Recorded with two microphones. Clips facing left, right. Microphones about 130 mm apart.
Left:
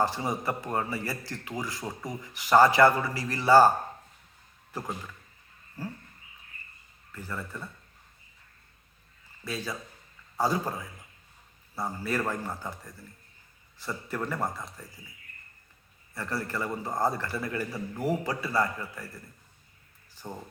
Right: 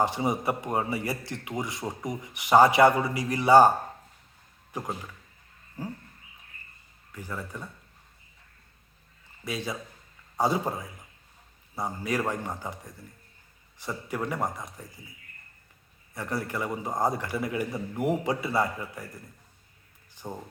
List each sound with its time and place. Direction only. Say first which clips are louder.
0.0 s a man's voice: right 2 dB; 20° right (ahead or behind)
4.7 s a man's voice: right 2 dB; 15° right (ahead or behind)
7.1 s a man's voice: right 1 dB; 10° right (ahead or behind)
9.4 s a man's voice: right 2 dB; 20° right (ahead or behind)
16.1 s a man's voice: right 1 dB; 15° right (ahead or behind)
20.2 s a man's voice: right 2 dB; 15° right (ahead or behind)